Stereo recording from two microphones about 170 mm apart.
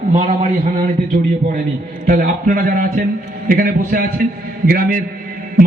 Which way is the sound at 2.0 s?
55° right (ahead or behind).